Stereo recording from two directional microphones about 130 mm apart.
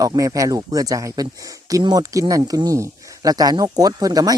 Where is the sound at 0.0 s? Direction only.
25° right (ahead or behind).